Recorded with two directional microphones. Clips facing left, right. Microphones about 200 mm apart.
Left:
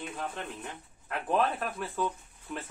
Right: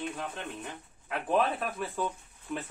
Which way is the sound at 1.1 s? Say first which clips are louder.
Right 1 dB; centre (ahead or behind).